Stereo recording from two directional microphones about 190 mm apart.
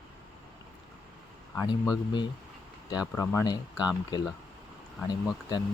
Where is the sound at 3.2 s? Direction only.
20° left (ahead or behind).